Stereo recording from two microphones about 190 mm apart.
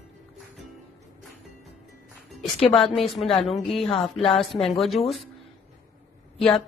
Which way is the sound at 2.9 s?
Centre (ahead or behind).